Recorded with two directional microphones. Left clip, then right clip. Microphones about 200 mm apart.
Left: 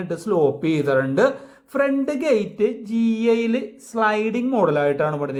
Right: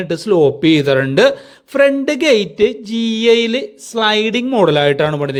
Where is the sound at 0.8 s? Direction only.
65° right (ahead or behind).